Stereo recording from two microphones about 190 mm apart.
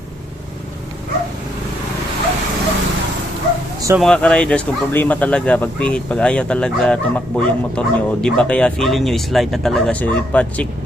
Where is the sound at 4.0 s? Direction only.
5° left (ahead or behind).